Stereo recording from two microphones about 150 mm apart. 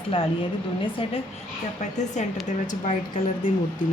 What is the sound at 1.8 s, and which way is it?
A woman's voice, 50° left (ahead or behind).